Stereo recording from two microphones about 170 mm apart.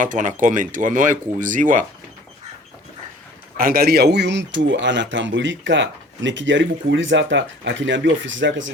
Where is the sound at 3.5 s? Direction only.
60° right (ahead or behind).